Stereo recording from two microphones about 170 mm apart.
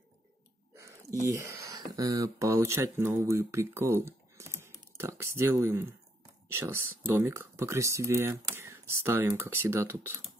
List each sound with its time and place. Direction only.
1.4 s speech: 20° right (ahead or behind)
4.6 s typing: 15° right (ahead or behind)
6.5 s speech: 15° right (ahead or behind)